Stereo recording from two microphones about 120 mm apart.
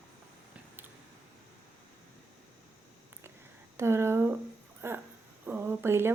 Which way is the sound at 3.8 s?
20° right (ahead or behind).